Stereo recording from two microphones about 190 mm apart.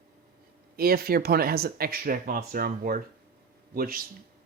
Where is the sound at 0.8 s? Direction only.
55° right (ahead or behind).